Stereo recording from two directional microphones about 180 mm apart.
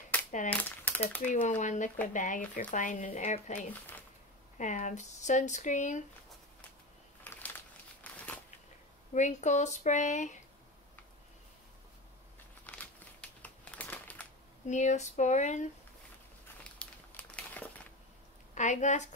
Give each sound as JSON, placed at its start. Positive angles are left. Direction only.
{"t": 0.5, "sound": "speech", "side_deg": 10}
{"t": 1.2, "sound": "speech", "side_deg": 45}
{"t": 7.2, "sound": "crumpling", "side_deg": 10}
{"t": 9.1, "sound": "speech", "side_deg": 40}
{"t": 12.7, "sound": "crumpling", "side_deg": 5}
{"t": 14.7, "sound": "speech", "side_deg": 40}
{"t": 16.7, "sound": "crumpling", "side_deg": 10}
{"t": 18.5, "sound": "a woman's voice", "side_deg": 40}